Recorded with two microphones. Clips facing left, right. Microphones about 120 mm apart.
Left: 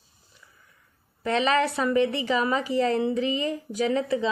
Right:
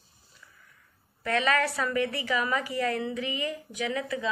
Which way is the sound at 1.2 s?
25° left (ahead or behind).